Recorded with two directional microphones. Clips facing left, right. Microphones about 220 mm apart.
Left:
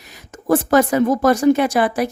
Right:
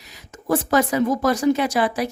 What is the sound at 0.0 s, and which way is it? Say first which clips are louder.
A woman's voice: left 5 dB; 50° left (ahead or behind).